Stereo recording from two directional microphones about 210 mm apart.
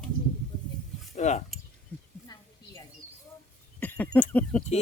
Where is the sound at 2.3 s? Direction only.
20° left (ahead or behind).